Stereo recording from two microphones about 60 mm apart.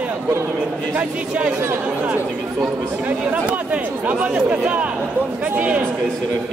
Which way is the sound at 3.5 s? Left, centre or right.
Right.